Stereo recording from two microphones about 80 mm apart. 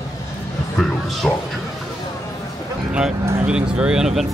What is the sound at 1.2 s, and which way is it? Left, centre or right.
Speech, centre.